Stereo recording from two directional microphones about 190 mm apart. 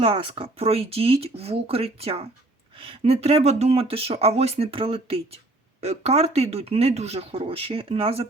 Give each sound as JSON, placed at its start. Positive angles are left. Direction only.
{"t": 0.0, "sound": "speech", "side_deg": -30}